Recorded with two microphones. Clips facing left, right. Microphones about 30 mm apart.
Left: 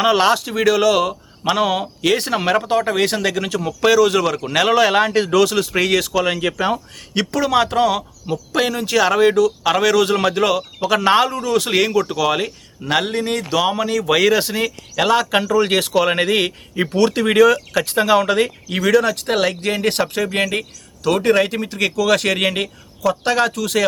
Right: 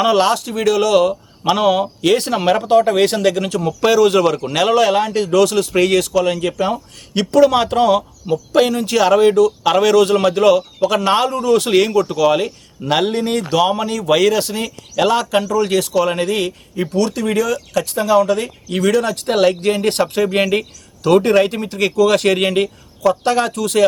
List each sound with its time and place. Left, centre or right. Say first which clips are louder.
0.0 s speech: right 1 dB; centre
5.3 s speech: right 2 dB; centre
7.3 s speech: right 6 dB; centre
16.0 s speech: left 2 dB; left
17.5 s speech: left 1 dB; left
18.7 s speech: right 1 dB; centre